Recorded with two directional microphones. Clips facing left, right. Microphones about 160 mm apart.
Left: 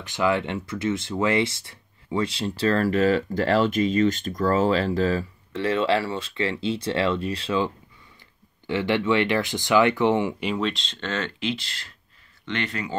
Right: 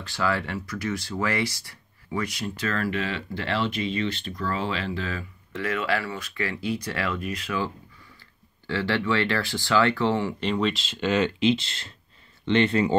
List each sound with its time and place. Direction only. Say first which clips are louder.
0.0 s speech: left 4 dB; 20° left (ahead or behind)
10.5 s speech: right 1 dB; centre (ahead or behind); by 12.9 s 25° right (ahead or behind)